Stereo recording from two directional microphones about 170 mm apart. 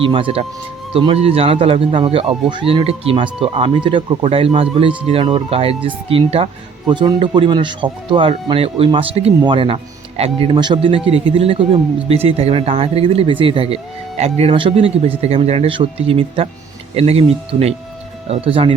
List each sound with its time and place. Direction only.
0.0 s speech: 30° right (ahead or behind)